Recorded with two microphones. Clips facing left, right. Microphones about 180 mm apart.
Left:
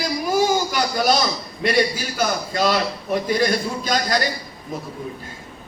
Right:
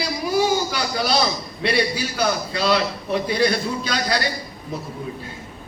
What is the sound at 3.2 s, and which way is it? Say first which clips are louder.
Speech: even; 45° left (ahead or behind).